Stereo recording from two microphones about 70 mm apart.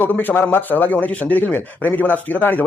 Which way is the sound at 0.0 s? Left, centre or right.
Left.